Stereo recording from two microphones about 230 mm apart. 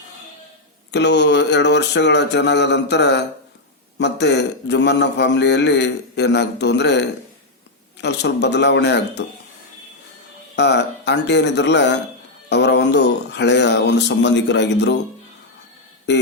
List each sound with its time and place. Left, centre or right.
0.9 s a man's voice: left
8.0 s a man's voice: left
10.5 s a man's voice: left